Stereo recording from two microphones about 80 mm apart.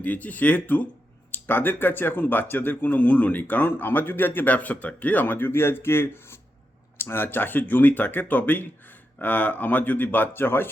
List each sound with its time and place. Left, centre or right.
0.0 s speech: centre